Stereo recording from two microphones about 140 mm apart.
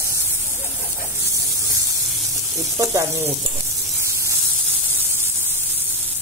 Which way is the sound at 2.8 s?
25° right (ahead or behind).